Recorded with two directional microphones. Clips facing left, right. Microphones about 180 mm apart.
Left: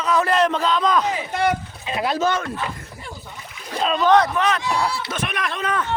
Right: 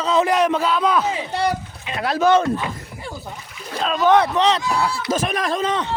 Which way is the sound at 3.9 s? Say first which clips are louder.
Right 1 dB; 10° right (ahead or behind).